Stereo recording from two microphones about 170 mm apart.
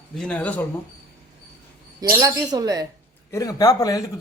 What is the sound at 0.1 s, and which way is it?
Speech, 5° left (ahead or behind).